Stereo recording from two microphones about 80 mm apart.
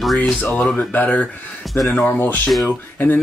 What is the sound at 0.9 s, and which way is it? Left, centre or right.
Speech, centre.